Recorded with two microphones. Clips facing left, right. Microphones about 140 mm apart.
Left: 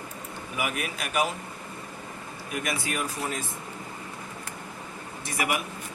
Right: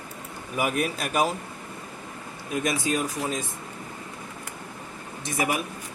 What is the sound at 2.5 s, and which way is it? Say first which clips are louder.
Speech: right 5 dB; 20° right (ahead or behind).